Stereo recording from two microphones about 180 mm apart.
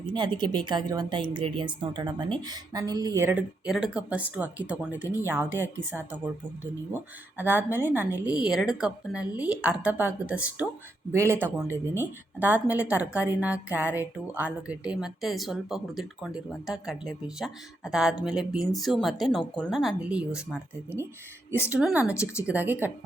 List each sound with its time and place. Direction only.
0.1 s a woman's voice: 25° right (ahead or behind)
3.7 s a woman's voice: 5° right (ahead or behind)
22.1 s speech: 15° left (ahead or behind)
22.4 s a woman's voice: 10° right (ahead or behind)